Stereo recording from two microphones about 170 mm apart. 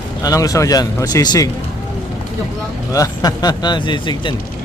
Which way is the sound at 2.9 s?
20° left (ahead or behind).